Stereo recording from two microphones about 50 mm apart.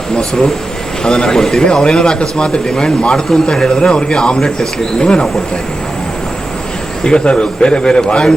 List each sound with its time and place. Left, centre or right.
0.2 s speech: centre
7.0 s speech: centre